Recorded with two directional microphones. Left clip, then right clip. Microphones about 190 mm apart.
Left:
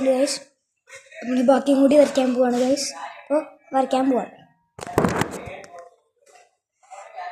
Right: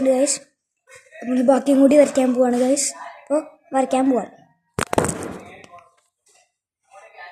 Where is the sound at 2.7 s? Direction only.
40° right (ahead or behind).